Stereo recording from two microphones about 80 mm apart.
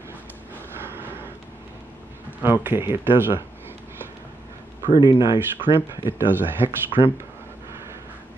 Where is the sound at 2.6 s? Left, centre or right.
Right.